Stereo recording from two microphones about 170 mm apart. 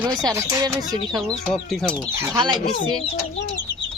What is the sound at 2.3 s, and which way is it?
Speech, 25° right (ahead or behind).